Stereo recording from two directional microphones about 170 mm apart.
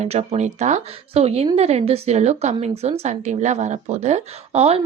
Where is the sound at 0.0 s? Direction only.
40° right (ahead or behind).